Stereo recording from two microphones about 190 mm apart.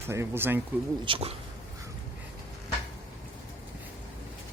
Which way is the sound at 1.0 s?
30° right (ahead or behind).